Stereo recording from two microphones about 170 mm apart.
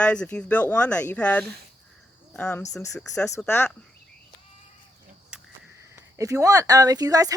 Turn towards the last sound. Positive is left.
turn(degrees=-20)  # may be behind; listen again after turning